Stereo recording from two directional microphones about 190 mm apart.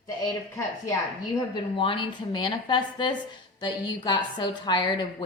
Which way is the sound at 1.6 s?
25° left (ahead or behind).